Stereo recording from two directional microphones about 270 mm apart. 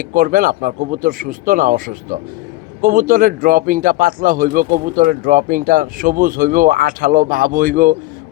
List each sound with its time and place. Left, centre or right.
0.0 s speech: right